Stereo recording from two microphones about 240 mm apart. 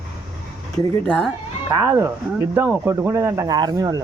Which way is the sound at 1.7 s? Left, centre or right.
Centre.